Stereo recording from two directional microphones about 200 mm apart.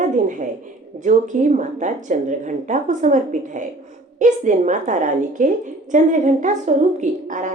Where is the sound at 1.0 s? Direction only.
40° right (ahead or behind).